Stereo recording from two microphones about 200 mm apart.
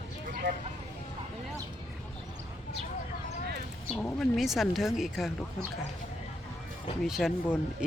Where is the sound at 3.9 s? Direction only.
5° left (ahead or behind).